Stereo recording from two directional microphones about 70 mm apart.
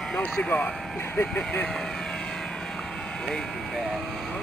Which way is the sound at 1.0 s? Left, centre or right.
Left.